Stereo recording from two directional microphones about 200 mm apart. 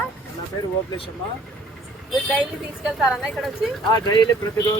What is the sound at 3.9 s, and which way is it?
Speech, 20° left (ahead or behind).